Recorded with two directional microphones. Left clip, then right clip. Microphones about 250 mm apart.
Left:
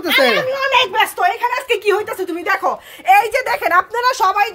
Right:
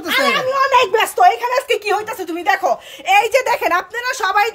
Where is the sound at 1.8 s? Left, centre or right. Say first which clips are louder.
Left 2 dB; centre.